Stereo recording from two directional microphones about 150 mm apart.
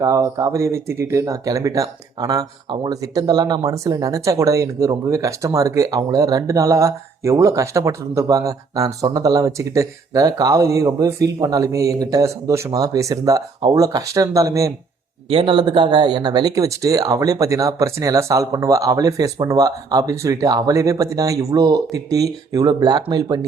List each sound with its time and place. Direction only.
0.0 s speech: 25° right (ahead or behind)
15.3 s speech: 35° right (ahead or behind)